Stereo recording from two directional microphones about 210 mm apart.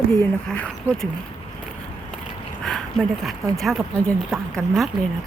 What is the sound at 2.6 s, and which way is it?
A woman's voice, centre (ahead or behind).